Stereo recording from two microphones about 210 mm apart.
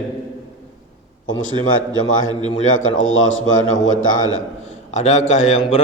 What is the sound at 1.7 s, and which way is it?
A man's voice, 70° left (ahead or behind).